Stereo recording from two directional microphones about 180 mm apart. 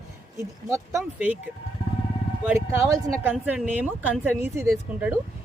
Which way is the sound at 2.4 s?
15° right (ahead or behind).